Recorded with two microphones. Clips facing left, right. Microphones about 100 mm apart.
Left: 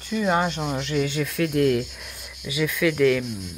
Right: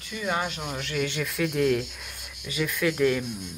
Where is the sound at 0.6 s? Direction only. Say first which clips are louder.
Left 6 dB; 20° left (ahead or behind).